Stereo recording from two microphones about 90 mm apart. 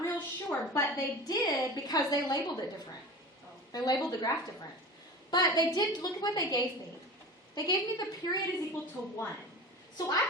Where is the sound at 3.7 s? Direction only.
45° left (ahead or behind).